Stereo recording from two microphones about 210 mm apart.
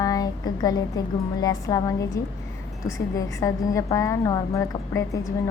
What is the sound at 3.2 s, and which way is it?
A woman's voice, 15° left (ahead or behind).